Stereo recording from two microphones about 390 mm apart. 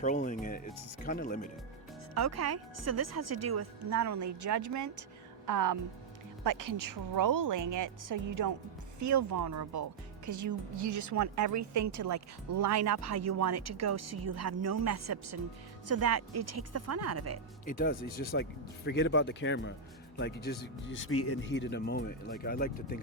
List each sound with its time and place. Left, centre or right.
0.0 s speech: centre
2.1 s a woman's voice: right
17.7 s speech: left